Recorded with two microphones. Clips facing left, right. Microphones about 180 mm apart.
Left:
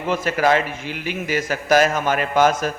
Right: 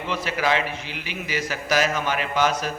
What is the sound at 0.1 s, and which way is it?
A man's voice, 45° left (ahead or behind).